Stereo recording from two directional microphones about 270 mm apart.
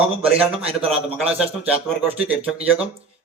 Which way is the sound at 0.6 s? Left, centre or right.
Right.